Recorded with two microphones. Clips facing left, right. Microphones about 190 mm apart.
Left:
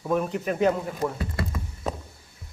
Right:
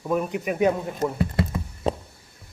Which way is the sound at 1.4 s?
30° right (ahead or behind).